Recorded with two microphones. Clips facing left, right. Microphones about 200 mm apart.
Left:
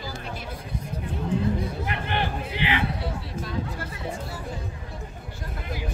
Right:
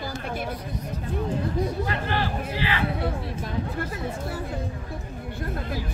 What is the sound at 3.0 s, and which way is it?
Chatter, 55° right (ahead or behind).